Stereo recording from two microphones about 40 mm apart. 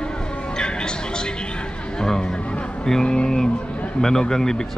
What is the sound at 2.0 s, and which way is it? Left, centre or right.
Music, centre.